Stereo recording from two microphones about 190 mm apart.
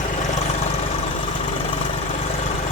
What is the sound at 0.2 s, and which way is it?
Vehicle, 40° left (ahead or behind).